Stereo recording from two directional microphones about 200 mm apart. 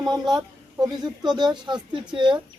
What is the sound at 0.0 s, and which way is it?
Speech, 20° right (ahead or behind).